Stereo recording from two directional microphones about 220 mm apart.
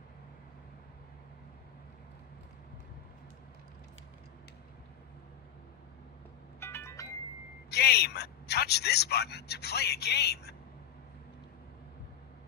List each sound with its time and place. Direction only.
6.6 s music: 10° left (ahead or behind)
7.7 s speech: 45° left (ahead or behind)